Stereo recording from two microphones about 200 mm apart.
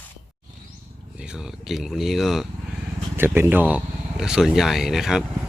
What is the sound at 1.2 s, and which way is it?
Speech, 5° right (ahead or behind).